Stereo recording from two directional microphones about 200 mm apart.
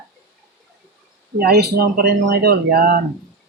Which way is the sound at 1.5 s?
55° right (ahead or behind).